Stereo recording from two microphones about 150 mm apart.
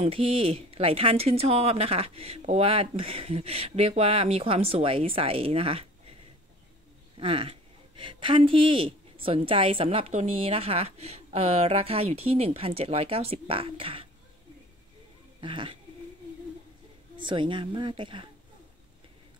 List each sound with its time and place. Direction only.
0.0 s speech: 40° right (ahead or behind)
7.2 s speech: 40° right (ahead or behind)
15.4 s speech: 35° right (ahead or behind)
17.2 s speech: 35° right (ahead or behind)